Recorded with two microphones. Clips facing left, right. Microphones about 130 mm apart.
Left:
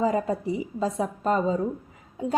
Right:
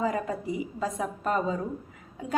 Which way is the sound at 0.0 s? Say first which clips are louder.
Left 4 dB; 30° left (ahead or behind).